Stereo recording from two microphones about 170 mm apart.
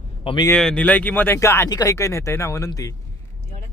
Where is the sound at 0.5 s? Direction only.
5° left (ahead or behind).